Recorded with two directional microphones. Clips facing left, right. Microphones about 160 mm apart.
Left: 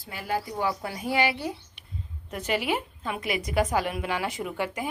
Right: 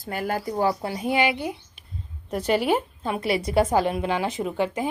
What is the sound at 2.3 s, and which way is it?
A woman's voice, 35° right (ahead or behind).